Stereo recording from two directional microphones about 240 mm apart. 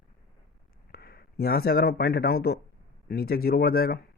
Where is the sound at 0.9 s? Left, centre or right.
Left.